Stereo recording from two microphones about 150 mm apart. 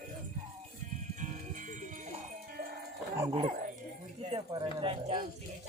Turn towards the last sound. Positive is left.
turn(degrees=-40)  # may be behind; listen again after turning